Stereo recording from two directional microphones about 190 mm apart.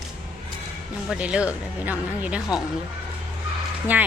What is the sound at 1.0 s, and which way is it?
Speech, 5° right (ahead or behind).